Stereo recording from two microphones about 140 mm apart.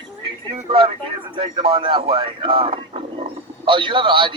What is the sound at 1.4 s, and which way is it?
Speech, 35° right (ahead or behind).